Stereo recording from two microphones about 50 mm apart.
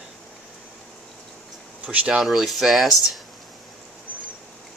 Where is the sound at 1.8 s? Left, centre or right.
Right.